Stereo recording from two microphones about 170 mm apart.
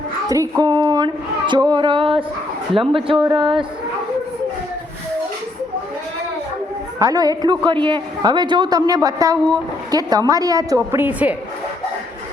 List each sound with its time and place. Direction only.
0.3 s a sound: 20° right (ahead or behind)
2.9 s a woman's voice: 30° right (ahead or behind)
7.0 s a woman's voice: 20° right (ahead or behind)